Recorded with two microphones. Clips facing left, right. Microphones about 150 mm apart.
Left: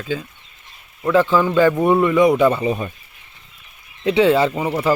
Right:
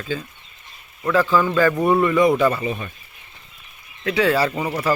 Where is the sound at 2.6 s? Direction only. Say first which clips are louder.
Left 5 dB; 35° left (ahead or behind).